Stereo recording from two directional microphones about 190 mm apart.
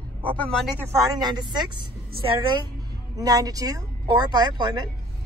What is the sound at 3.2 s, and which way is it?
Speech, 20° right (ahead or behind).